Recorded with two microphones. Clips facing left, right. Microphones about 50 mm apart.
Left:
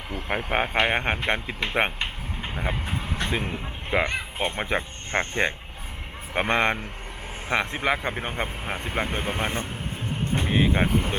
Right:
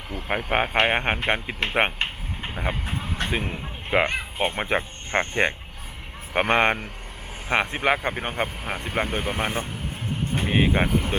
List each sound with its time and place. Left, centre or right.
0.1 s a sound: centre
0.5 s speech: centre
1.6 s a sound: centre
3.4 s a man's voice: centre
3.9 s speech: centre
8.6 s speech: centre
10.8 s speech: centre